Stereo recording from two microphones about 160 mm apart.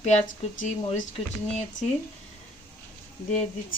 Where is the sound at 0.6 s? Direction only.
50° left (ahead or behind).